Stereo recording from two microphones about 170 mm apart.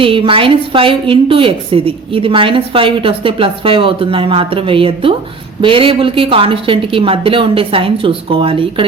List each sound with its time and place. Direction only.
0.0 s a woman's voice: 30° right (ahead or behind)